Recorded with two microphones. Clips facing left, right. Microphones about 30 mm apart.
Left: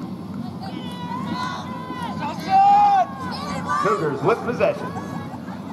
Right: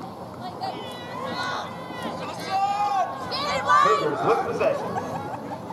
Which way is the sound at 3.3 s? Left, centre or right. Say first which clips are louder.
Right 4 dB; right.